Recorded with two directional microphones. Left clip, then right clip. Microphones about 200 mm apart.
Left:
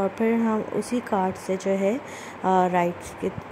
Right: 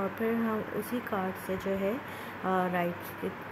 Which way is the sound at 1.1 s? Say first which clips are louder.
Left 10 dB; 20° left (ahead or behind).